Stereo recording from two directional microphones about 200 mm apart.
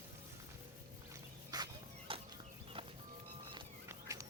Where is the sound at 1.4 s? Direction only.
20° right (ahead or behind).